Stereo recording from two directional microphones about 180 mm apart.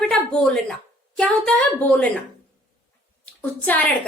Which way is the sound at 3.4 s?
10° left (ahead or behind).